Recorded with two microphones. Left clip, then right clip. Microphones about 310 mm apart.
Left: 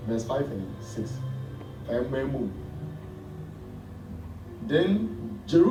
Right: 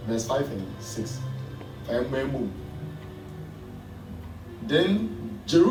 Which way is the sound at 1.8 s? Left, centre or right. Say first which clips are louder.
Right 1 dB; centre.